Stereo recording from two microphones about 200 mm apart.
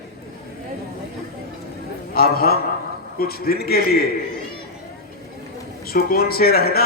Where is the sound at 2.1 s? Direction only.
50° left (ahead or behind).